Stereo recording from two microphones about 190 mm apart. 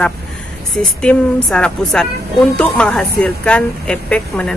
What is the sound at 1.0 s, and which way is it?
Speech, 5° left (ahead or behind).